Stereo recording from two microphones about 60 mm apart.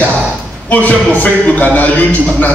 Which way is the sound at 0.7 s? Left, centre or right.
Left.